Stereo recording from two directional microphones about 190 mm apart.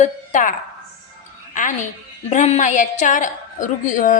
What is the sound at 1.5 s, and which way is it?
A woman's voice, 40° left (ahead or behind).